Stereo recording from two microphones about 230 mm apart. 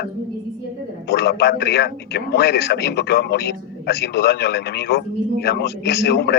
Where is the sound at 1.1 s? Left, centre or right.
Left.